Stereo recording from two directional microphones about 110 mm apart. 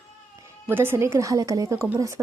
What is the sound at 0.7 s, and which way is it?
Speech, 20° right (ahead or behind).